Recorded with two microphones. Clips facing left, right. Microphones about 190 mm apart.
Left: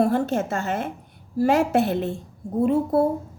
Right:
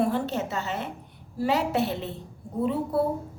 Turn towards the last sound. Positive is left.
turn(degrees=45)  # may be behind; listen again after turning